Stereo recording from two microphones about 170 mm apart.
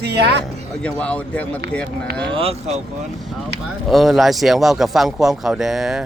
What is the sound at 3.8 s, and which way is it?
Speech, centre (ahead or behind).